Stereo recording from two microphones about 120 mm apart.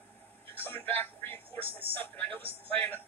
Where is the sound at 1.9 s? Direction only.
15° left (ahead or behind).